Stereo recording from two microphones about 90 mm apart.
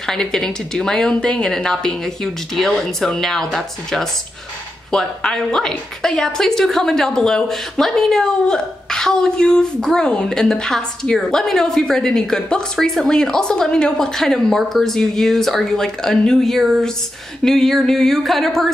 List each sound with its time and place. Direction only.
0.0 s a woman's voice: 5° left (ahead or behind)